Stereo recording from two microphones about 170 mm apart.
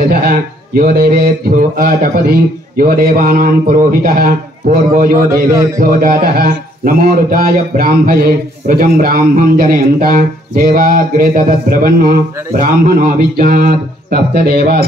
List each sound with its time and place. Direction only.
0.7 s a man's voice: 60° right (ahead or behind)